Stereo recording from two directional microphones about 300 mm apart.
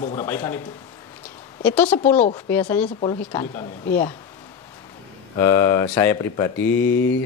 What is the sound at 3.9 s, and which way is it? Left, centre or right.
Speech, centre.